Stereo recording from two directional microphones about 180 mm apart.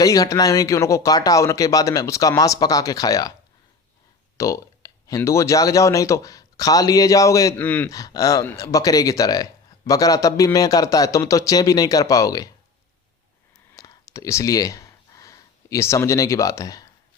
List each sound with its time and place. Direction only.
0.0 s speech: 20° left (ahead or behind)
4.4 s speech: 15° left (ahead or behind)
7.9 s speech: 20° left (ahead or behind)
13.7 s a sound: 20° left (ahead or behind)